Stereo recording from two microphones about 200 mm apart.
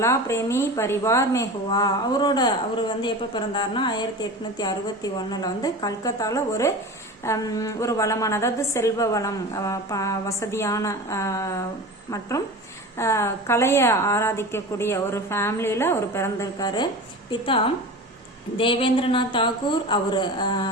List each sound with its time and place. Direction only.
0.0 s a woman's voice: 15° left (ahead or behind)
13.0 s a woman's voice: 15° left (ahead or behind)
18.5 s a woman's voice: 25° left (ahead or behind)